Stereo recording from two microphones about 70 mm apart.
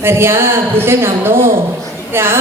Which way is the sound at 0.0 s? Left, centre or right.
Right.